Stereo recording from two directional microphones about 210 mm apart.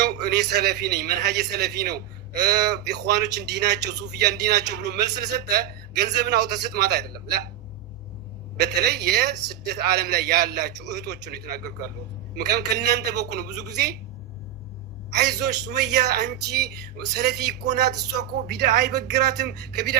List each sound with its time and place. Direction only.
0.0 s a man's voice: 50° right (ahead or behind)
8.5 s a man's voice: 50° right (ahead or behind)
15.1 s a man's voice: 50° right (ahead or behind)